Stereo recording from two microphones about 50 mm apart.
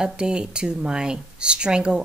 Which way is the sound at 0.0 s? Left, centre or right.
Centre.